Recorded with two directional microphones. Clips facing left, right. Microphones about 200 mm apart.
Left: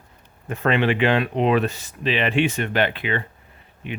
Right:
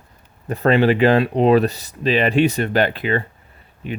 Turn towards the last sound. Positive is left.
turn(degrees=-40)  # may be behind; listen again after turning